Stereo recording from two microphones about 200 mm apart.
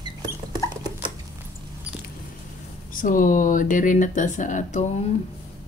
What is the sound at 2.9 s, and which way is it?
Speech, 40° left (ahead or behind).